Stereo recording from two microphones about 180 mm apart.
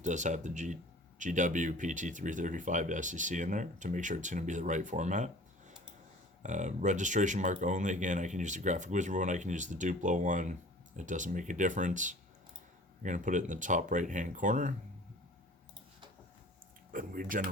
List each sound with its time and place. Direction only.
0.0 s speech: 40° right (ahead or behind)
16.9 s speech: 50° right (ahead or behind)